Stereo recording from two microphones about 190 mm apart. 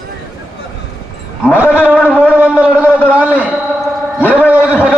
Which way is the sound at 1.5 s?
5° right (ahead or behind).